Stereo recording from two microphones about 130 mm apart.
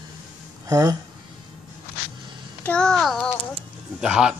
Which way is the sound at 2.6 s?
5° left (ahead or behind).